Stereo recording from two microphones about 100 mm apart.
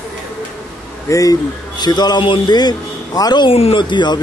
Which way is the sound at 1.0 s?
35° left (ahead or behind).